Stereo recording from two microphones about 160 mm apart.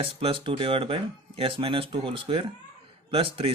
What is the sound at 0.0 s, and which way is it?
Speech, 35° right (ahead or behind).